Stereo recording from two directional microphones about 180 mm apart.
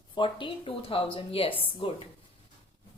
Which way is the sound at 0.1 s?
25° left (ahead or behind).